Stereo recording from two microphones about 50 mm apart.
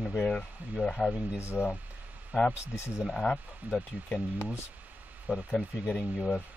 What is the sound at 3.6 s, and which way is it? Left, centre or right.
Speech, right.